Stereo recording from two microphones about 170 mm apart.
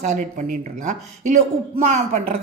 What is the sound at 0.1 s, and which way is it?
Speech, 50° right (ahead or behind).